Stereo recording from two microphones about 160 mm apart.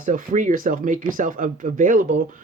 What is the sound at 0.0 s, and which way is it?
Speech, 55° right (ahead or behind).